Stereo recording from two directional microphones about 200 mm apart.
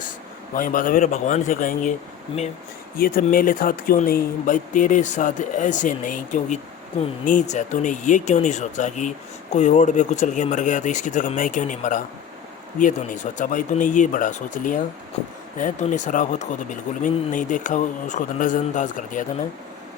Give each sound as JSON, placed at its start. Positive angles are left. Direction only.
{"t": 0.5, "sound": "speech", "side_deg": 45}